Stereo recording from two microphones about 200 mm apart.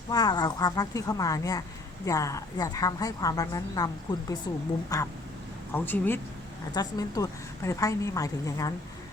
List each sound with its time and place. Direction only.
0.1 s a woman's voice: 20° left (ahead or behind)